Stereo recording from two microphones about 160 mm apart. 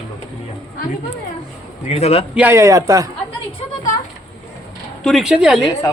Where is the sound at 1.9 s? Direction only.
40° left (ahead or behind).